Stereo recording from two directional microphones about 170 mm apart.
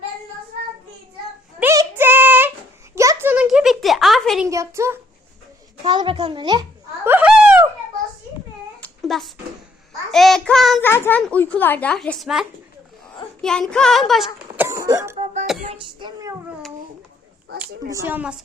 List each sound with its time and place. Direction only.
1.5 s child singing: 15° right (ahead or behind)
2.9 s a sound: 15° right (ahead or behind); by 4.4 s centre (ahead or behind)
4.4 s a woman's voice: 20° right (ahead or behind)
5.8 s a child's voice: 25° right (ahead or behind)
7.0 s a sound: 10° right (ahead or behind)
8.8 s a sound: centre (ahead or behind)
10.1 s speech: centre (ahead or behind)
10.8 s speech: 15° left (ahead or behind)
14.5 s cough: 15° right (ahead or behind)
15.2 s music: 45° right (ahead or behind)
15.8 s a sound: 25° right (ahead or behind)
17.8 s a woman's voice: 15° right (ahead or behind)